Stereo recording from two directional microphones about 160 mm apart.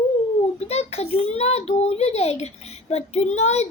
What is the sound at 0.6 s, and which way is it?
A child's voice, 40° left (ahead or behind).